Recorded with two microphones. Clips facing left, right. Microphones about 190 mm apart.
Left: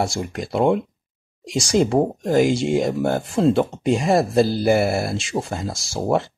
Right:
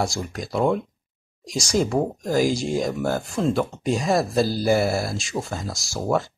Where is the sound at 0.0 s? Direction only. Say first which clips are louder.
Left 3 dB; 25° left (ahead or behind).